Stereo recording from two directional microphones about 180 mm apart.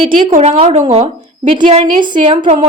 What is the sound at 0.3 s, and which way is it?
A woman's voice, 35° right (ahead or behind).